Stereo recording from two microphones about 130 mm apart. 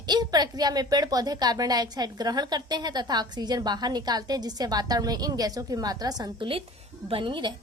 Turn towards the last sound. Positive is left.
turn(degrees=-40)  # may be behind; listen again after turning